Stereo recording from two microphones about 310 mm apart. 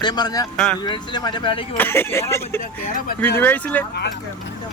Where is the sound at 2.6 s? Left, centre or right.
Left.